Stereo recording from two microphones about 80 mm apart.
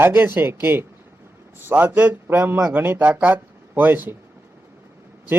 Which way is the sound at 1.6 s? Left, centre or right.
Right.